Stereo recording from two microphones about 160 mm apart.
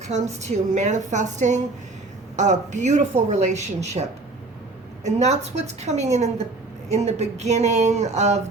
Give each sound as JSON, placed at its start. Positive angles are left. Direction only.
{"t": 0.1, "sound": "a woman's voice", "side_deg": -45}
{"t": 5.0, "sound": "a woman's voice", "side_deg": -45}